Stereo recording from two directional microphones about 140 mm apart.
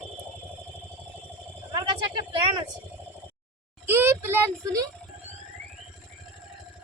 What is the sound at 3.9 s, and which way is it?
Child singing, 15° right (ahead or behind).